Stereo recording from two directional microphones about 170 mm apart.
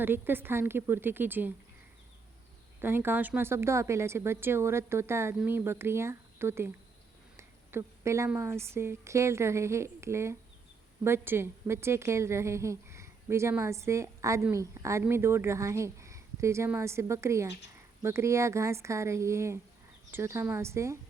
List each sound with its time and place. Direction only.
0.0 s a woman's voice: 10° right (ahead or behind)
2.8 s a woman's voice: 10° right (ahead or behind)
7.3 s a sound: 15° right (ahead or behind)
8.4 s a woman's voice: 15° right (ahead or behind)